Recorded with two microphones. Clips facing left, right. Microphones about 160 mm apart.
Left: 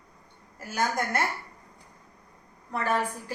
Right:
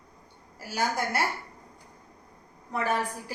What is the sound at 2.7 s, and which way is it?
Speech, 10° right (ahead or behind).